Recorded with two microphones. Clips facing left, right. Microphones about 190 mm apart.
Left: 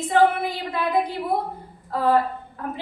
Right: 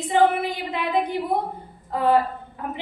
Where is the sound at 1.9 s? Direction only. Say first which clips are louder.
Even; 20° right (ahead or behind).